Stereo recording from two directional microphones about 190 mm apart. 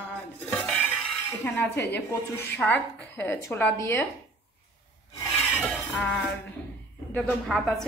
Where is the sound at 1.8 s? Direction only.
65° left (ahead or behind).